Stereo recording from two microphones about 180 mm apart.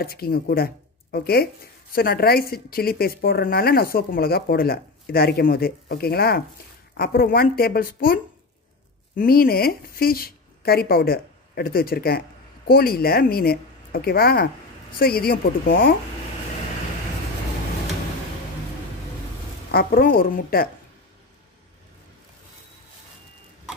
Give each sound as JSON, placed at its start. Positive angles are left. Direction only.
{"t": 0.0, "sound": "a woman's voice", "side_deg": 55}
{"t": 19.7, "sound": "a woman's voice", "side_deg": 55}